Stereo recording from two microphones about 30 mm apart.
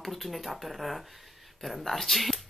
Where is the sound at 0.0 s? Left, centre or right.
Centre.